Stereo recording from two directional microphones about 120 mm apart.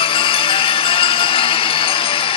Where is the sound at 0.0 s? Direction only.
50° left (ahead or behind).